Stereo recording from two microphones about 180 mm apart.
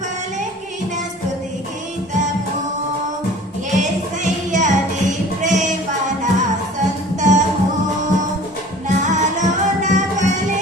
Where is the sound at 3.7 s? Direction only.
45° right (ahead or behind).